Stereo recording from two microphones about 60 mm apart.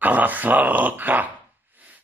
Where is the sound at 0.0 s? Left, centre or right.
Right.